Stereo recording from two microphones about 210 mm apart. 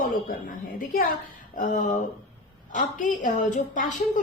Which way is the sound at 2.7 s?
35° left (ahead or behind).